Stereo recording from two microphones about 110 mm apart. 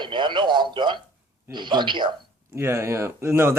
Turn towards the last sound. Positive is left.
turn(degrees=-25)  # may be behind; listen again after turning